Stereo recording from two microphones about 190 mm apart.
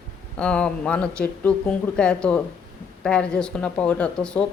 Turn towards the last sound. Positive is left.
turn(degrees=5)  # may be behind; listen again after turning